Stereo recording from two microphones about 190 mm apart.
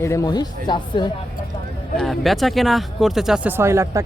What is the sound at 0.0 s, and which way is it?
Speech, 15° left (ahead or behind).